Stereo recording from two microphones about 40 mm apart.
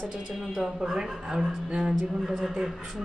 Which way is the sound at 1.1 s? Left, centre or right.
Centre.